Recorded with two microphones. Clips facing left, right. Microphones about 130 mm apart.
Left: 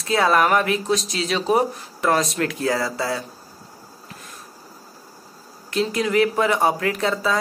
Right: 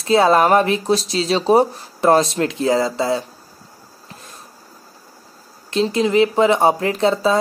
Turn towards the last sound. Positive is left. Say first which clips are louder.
# right 5 dB
turn(degrees=-30)  # may be behind; listen again after turning